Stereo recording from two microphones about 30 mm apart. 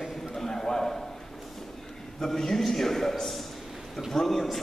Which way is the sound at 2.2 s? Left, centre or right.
Centre.